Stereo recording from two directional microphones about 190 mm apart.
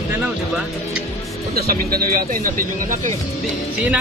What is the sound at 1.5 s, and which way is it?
A man's voice, 50° right (ahead or behind).